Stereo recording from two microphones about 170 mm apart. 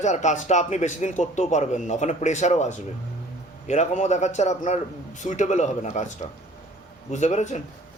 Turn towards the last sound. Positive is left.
turn(degrees=45)  # may be behind; listen again after turning